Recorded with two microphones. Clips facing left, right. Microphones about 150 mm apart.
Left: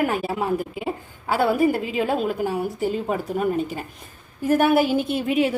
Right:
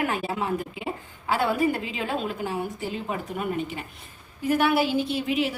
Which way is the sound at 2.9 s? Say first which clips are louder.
Left 6 dB; 40° left (ahead or behind).